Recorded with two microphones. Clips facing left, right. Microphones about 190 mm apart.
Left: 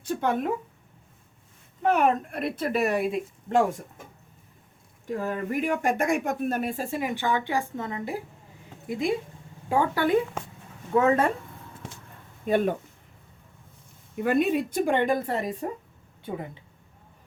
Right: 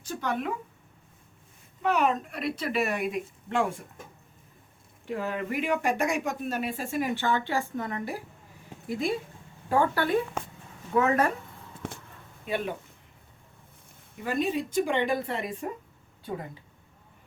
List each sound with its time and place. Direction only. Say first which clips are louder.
0.0 s speech: left 5 dB; 55° left (ahead or behind)
1.8 s speech: left 3 dB; 50° left (ahead or behind)
5.0 s speech: left 2 dB; 45° left (ahead or behind)
7.0 s a woman's voice: right 1 dB; 15° left (ahead or behind)
10.9 s a woman's voice: left 3 dB; 25° left (ahead or behind)
12.5 s speech: left 7 dB; 45° left (ahead or behind)
14.2 s speech: left 5 dB; 55° left (ahead or behind)